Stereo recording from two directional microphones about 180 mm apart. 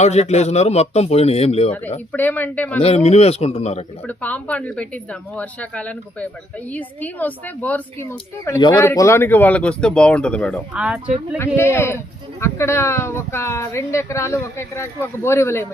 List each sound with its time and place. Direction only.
0.0 s a man's voice: 40° left (ahead or behind)
2.1 s speech: 10° left (ahead or behind)
2.8 s a man's voice: 35° left (ahead or behind)
4.0 s speech: 10° left (ahead or behind)
8.4 s speech: 20° left (ahead or behind); by 10.6 s 5° left (ahead or behind)
10.8 s speech: 5° right (ahead or behind)
11.3 s speech: 15° left (ahead or behind)